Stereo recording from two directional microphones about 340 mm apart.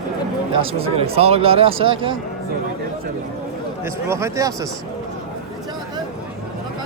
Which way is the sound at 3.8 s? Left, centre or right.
Centre.